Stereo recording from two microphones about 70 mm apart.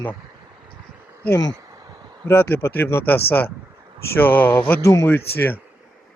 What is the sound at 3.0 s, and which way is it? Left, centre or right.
Speech, left.